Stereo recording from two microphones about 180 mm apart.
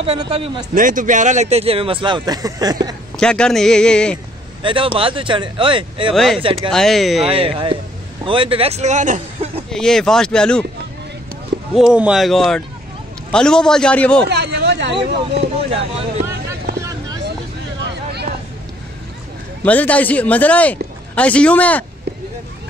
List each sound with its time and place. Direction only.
0.0 s speech: 30° right (ahead or behind)
0.7 s speech: 50° right (ahead or behind); by 3.0 s 20° right (ahead or behind)
3.2 s a man's voice: 5° left (ahead or behind)
4.6 s speech: 30° right (ahead or behind)
6.1 s a man's voice: centre (ahead or behind)
7.2 s speech: 30° right (ahead or behind)
9.7 s a man's voice: 5° left (ahead or behind)
11.7 s a man's voice: 5° right (ahead or behind)
14.2 s speech: 65° right (ahead or behind)
17.8 s vehicle: 65° right (ahead or behind)
19.6 s speech: 10° left (ahead or behind)